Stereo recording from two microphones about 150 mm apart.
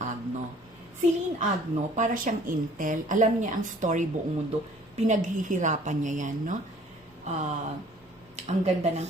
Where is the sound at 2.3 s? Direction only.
55° right (ahead or behind).